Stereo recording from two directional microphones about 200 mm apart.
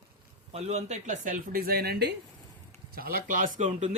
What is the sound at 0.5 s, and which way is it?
Speech, 35° right (ahead or behind).